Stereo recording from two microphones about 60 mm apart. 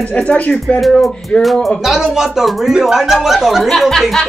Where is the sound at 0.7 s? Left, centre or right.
Centre.